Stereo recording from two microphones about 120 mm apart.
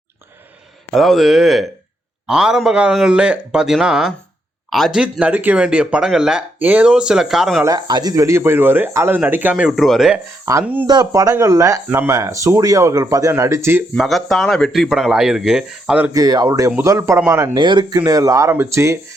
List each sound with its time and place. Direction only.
0.9 s speech: centre (ahead or behind)
7.6 s speech: 35° right (ahead or behind); by 9.6 s 15° right (ahead or behind)
9.6 s speech: centre (ahead or behind)
10.5 s speech: 25° right (ahead or behind)
13.9 s speech: centre (ahead or behind)
16.1 s speech: 35° right (ahead or behind)
17.5 s speech: 40° right (ahead or behind)